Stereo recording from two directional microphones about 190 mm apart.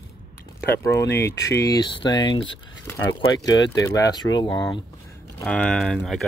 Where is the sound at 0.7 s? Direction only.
15° left (ahead or behind).